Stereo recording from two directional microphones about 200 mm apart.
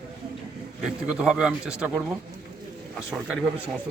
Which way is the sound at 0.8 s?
5° right (ahead or behind).